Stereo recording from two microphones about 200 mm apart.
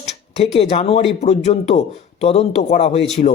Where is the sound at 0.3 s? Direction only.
30° left (ahead or behind).